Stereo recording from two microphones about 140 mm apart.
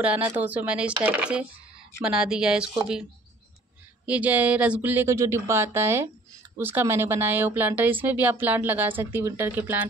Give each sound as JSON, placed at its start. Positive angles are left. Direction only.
{"t": 0.4, "sound": "speech", "side_deg": -10}